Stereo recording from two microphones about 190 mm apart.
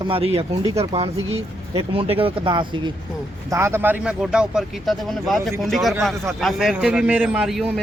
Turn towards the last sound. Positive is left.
turn(degrees=0)  # may be behind; listen again after turning